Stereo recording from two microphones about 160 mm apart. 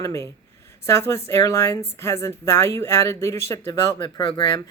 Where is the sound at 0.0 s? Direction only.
20° left (ahead or behind).